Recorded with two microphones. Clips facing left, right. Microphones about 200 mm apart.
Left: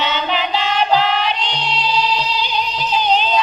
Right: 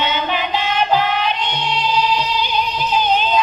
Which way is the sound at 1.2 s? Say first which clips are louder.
Right 1 dB; 50° right (ahead or behind).